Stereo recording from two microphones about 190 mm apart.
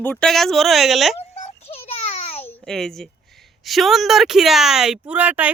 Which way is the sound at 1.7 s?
30° left (ahead or behind).